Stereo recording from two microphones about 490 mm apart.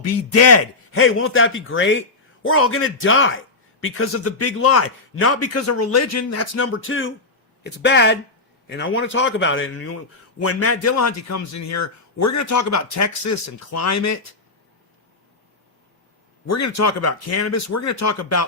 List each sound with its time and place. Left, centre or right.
0.0 s a man's voice: left
16.5 s a man's voice: left